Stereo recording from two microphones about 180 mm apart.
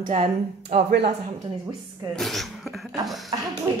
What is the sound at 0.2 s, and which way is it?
Speech, 35° right (ahead or behind).